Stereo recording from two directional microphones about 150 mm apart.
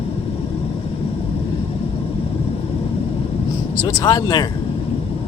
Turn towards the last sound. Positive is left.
turn(degrees=25)  # may be behind; listen again after turning